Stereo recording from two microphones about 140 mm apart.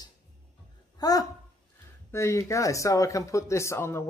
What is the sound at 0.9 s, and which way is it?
Speech, 25° left (ahead or behind).